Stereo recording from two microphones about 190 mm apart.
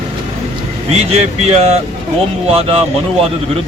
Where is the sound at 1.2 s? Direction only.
35° right (ahead or behind).